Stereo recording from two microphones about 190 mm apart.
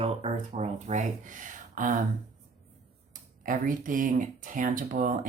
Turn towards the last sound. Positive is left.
turn(degrees=-45)  # may be behind; listen again after turning